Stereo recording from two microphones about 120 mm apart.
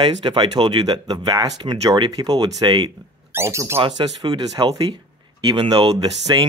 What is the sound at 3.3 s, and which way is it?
Speech, 25° right (ahead or behind).